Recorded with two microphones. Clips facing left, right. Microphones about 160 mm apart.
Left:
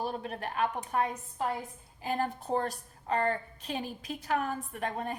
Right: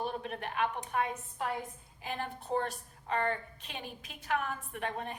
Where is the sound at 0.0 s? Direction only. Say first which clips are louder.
Left 2 dB; 40° left (ahead or behind).